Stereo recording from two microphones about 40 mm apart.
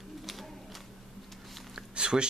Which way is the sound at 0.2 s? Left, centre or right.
Centre.